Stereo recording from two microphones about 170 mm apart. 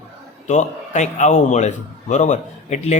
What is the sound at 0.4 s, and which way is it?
A man's voice, 45° left (ahead or behind).